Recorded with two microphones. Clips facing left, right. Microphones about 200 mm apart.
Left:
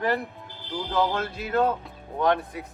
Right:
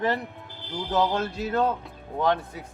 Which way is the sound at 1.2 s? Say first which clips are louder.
Right 3 dB; 25° right (ahead or behind).